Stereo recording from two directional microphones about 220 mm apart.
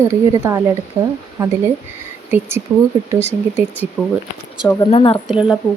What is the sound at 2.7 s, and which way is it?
Speech, 10° right (ahead or behind).